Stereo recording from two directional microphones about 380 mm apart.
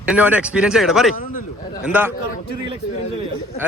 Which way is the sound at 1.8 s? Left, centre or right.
Centre.